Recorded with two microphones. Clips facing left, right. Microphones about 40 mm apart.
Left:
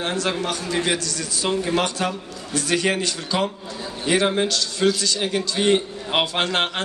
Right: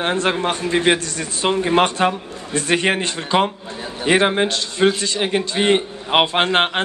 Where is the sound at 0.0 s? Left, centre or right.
Right.